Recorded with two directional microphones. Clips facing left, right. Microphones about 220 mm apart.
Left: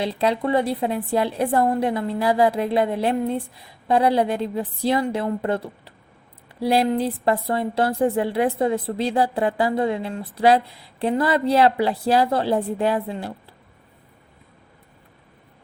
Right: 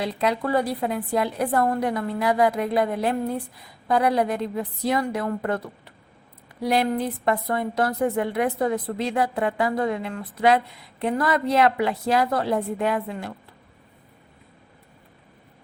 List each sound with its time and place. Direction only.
0.0 s a woman's voice: 30° left (ahead or behind)